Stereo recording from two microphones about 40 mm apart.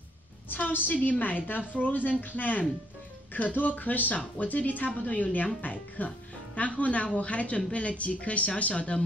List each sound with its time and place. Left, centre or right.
0.5 s a woman's voice: left